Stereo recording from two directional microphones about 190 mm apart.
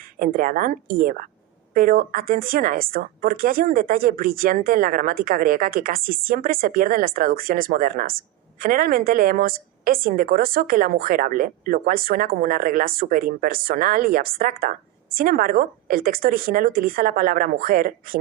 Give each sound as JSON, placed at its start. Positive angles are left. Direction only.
{"t": 0.2, "sound": "a woman's voice", "side_deg": -45}